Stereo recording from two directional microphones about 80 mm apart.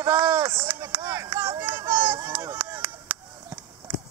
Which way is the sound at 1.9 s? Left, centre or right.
Right.